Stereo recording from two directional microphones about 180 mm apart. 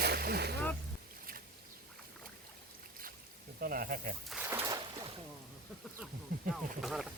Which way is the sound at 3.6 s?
55° right (ahead or behind).